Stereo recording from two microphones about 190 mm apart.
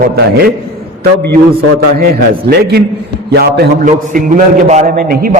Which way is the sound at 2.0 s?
55° right (ahead or behind).